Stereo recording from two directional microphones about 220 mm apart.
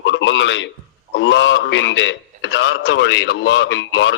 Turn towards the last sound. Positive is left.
turn(degrees=60)  # may be behind; listen again after turning